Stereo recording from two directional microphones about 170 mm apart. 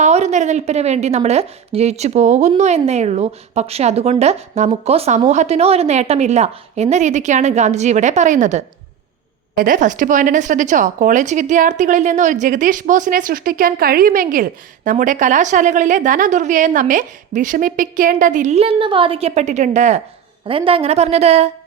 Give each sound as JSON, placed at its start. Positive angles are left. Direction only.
{"t": 0.0, "sound": "a woman's voice", "side_deg": -40}
{"t": 20.5, "sound": "a woman's voice", "side_deg": -30}